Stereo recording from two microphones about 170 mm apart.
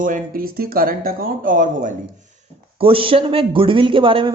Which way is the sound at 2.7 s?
35° right (ahead or behind).